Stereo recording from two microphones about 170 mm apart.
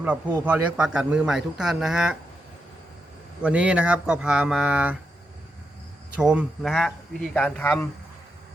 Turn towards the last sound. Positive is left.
turn(degrees=10)  # may be behind; listen again after turning